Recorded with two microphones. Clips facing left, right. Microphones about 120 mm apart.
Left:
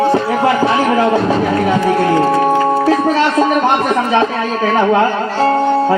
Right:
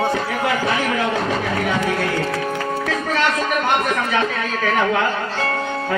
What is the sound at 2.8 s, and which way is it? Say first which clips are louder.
Speech: left 8 dB; 35° left (ahead or behind).